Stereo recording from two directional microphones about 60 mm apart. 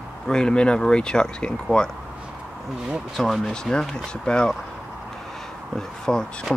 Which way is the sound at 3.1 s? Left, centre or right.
Centre.